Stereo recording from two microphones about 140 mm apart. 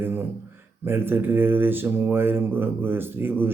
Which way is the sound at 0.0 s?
15° right (ahead or behind).